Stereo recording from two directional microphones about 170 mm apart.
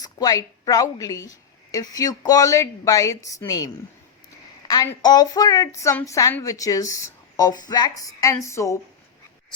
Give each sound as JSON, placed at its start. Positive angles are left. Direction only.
{"t": 0.0, "sound": "a woman's voice", "side_deg": 20}
{"t": 4.7, "sound": "a woman's voice", "side_deg": 25}